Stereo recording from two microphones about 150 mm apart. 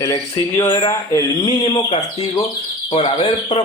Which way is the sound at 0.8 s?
25° left (ahead or behind).